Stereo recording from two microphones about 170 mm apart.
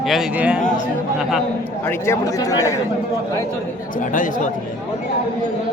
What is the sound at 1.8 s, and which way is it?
Speech, 15° left (ahead or behind).